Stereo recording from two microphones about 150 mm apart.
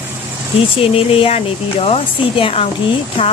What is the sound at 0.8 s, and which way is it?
Speech, 40° left (ahead or behind).